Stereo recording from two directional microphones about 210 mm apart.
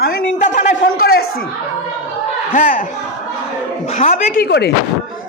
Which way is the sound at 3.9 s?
35° left (ahead or behind).